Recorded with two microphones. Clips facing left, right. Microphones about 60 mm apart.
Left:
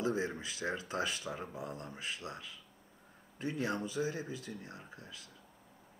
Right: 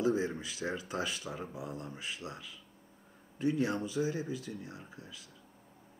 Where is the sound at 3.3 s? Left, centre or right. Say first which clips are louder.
Right 5 dB; left.